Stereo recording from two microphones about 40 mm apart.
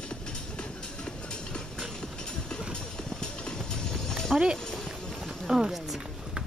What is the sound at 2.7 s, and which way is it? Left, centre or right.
Clip-clop, centre.